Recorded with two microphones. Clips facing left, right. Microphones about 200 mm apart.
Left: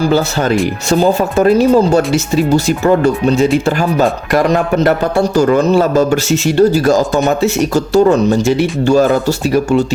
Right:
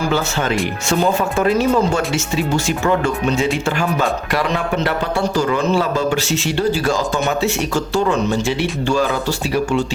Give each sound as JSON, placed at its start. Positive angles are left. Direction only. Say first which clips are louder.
{"t": 0.9, "sound": "speech", "louder": "left 5 dB", "side_deg": 35}